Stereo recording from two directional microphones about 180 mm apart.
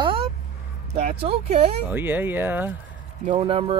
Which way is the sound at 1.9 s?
10° right (ahead or behind).